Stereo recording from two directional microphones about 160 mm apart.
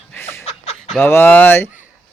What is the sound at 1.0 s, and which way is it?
Speech, 10° left (ahead or behind).